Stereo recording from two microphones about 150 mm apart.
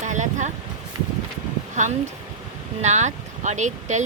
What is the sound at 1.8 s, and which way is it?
Speech, 55° right (ahead or behind).